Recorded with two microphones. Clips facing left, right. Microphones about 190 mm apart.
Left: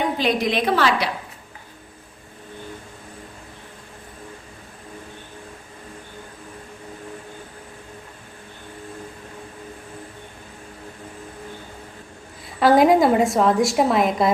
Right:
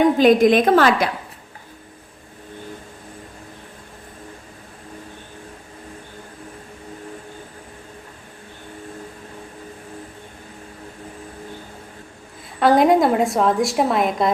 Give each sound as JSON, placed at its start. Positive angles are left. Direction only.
{"t": 0.2, "sound": "a woman's voice", "side_deg": -50}
{"t": 12.5, "sound": "a woman's voice", "side_deg": 0}